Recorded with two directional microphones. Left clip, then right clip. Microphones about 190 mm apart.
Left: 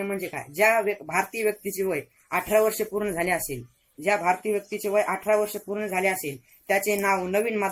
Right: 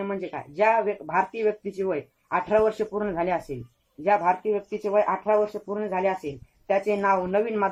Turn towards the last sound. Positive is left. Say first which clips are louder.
# right 1 dB
turn(degrees=5)  # may be behind; listen again after turning